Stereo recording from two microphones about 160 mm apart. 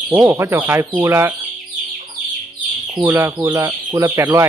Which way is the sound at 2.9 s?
15° right (ahead or behind).